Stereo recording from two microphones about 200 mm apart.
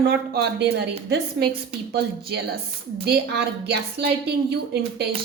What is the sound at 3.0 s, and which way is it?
A woman's voice, 55° right (ahead or behind).